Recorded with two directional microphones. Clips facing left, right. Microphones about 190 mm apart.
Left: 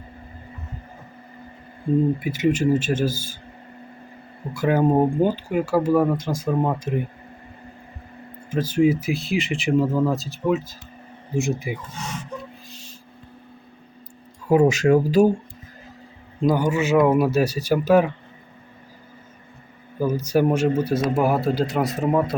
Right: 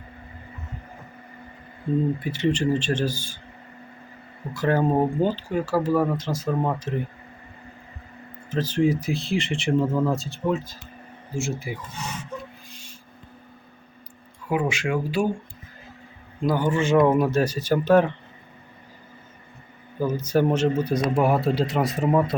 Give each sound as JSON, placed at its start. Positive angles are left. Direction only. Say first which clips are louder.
{"t": 2.4, "sound": "speech", "louder": "left 3 dB", "side_deg": 10}
{"t": 3.1, "sound": "speech", "louder": "left 3 dB", "side_deg": 40}
{"t": 4.5, "sound": "speech", "louder": "left 3 dB", "side_deg": 10}
{"t": 8.4, "sound": "speech", "louder": "left 3 dB", "side_deg": 10}
{"t": 11.3, "sound": "speech", "louder": "left 5 dB", "side_deg": 20}
{"t": 14.4, "sound": "speech", "louder": "left 8 dB", "side_deg": 40}
{"t": 16.4, "sound": "speech", "louder": "left 2 dB", "side_deg": 15}
{"t": 20.0, "sound": "speech", "louder": "left 2 dB", "side_deg": 10}